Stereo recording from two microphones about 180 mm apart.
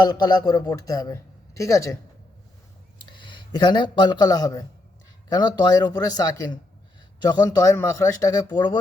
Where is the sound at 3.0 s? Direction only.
25° left (ahead or behind).